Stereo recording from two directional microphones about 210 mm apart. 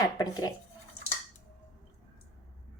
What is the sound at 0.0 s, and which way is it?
Speech, 15° left (ahead or behind).